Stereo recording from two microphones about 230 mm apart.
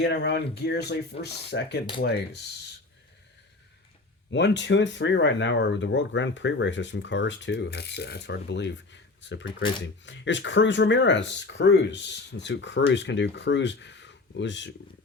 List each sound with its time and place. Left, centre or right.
0.0 s speech: left
4.3 s speech: left